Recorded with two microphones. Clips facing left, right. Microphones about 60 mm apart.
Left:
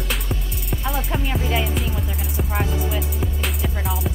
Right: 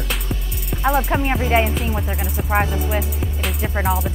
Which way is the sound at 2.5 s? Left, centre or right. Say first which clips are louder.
Right 6 dB; right.